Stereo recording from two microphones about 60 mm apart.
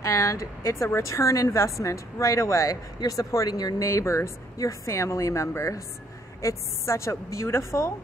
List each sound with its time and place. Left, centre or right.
0.0 s a woman's voice: left
3.9 s a woman's voice: left